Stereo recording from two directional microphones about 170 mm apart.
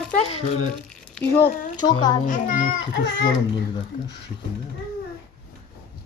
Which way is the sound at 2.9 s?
75° left (ahead or behind).